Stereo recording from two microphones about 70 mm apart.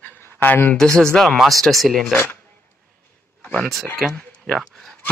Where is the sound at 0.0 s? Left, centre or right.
Left.